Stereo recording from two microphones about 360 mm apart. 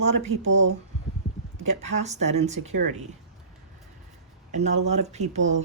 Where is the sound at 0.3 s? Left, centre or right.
Right.